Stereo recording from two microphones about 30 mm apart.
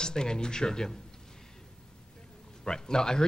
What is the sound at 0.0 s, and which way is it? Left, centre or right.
Speech, left.